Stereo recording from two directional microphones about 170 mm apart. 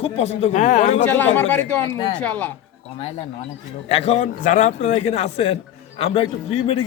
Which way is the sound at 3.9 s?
40° left (ahead or behind).